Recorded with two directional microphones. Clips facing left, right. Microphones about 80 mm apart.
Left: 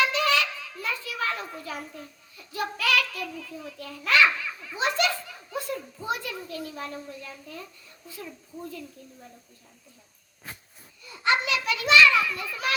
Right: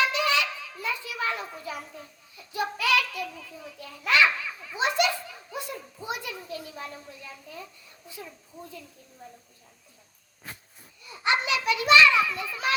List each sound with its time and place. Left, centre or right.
0.0 s children playing: centre
2.5 s a child's voice: centre
4.8 s a sound: centre
6.1 s a child's voice: centre
11.2 s a child's voice: centre